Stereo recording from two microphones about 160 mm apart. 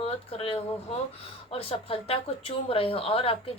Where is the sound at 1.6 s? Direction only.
35° left (ahead or behind).